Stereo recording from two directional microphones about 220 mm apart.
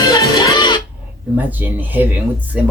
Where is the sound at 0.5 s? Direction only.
20° left (ahead or behind).